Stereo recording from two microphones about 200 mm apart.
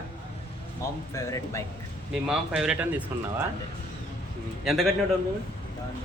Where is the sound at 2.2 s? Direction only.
5° right (ahead or behind).